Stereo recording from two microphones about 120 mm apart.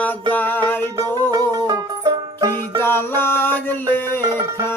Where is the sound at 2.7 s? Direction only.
20° left (ahead or behind).